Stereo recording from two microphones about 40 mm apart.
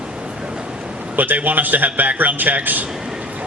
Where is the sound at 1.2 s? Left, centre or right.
Right.